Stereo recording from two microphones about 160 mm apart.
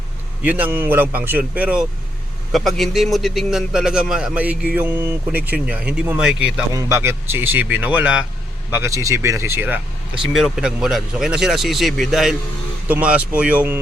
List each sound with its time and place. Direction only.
0.4 s a man's voice: 10° right (ahead or behind)
6.7 s a man's voice: 20° right (ahead or behind)
8.7 s a man's voice: 15° right (ahead or behind)